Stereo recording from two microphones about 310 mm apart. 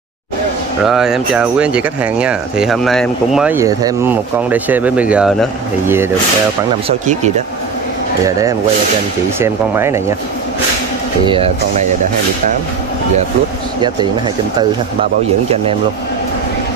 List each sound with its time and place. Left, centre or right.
0.8 s speech: centre
9.4 s speech: centre
11.2 s speech: centre
13.7 s speech: centre